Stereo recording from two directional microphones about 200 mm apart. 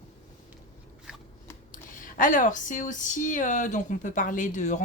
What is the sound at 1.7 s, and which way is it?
Speech, 40° left (ahead or behind).